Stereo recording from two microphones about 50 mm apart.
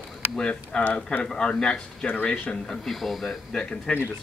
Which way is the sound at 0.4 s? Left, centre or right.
Left.